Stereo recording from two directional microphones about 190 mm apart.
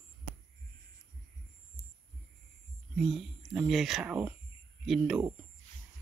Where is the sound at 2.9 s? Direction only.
Centre (ahead or behind).